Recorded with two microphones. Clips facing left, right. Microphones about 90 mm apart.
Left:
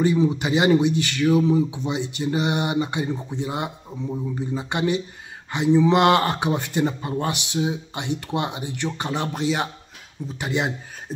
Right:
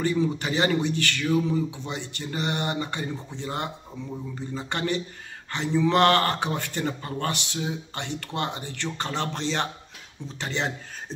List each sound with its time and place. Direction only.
0.0 s speech: 20° left (ahead or behind)